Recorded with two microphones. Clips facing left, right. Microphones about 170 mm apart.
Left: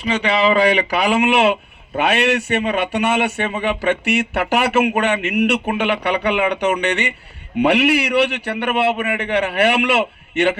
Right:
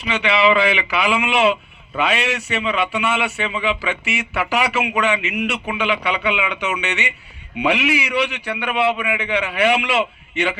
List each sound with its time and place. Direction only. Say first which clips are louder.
0.0 s speech: left 1 dB; 35° left (ahead or behind)
2.0 s a man's voice: left 4 dB; 55° left (ahead or behind)